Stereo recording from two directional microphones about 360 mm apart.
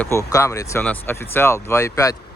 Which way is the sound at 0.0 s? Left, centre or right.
Centre.